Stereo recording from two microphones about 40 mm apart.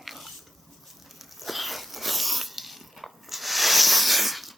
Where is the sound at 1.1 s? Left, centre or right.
Centre.